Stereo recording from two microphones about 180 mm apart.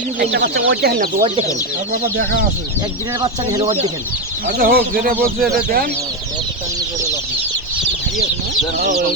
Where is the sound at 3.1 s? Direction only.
20° right (ahead or behind).